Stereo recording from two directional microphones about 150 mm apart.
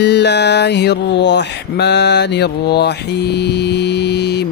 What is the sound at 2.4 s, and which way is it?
Mantra, 90° left.